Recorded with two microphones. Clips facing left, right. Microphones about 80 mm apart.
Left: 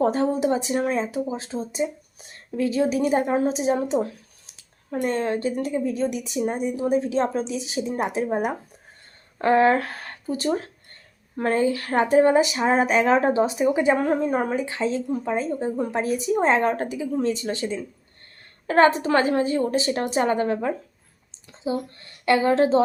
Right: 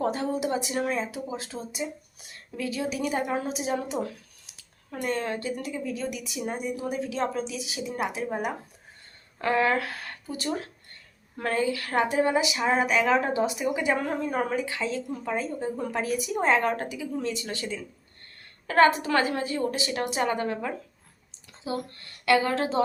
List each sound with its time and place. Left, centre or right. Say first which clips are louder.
0.0 s a woman's voice: left 6 dB; left